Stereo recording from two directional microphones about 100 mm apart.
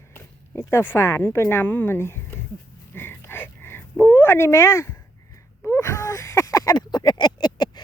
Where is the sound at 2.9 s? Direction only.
25° left (ahead or behind).